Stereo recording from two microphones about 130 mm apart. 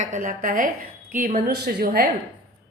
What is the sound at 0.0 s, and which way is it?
A woman's voice, 80° right.